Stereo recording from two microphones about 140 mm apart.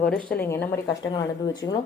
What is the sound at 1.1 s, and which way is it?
Speech, 30° left (ahead or behind).